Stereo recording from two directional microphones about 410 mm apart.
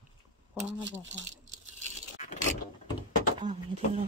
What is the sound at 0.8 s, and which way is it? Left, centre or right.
Speech, right.